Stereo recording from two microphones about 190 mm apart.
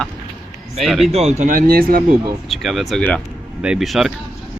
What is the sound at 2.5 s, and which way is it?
Speech, centre (ahead or behind).